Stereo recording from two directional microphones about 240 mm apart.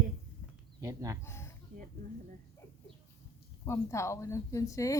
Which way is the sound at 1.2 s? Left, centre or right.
Centre.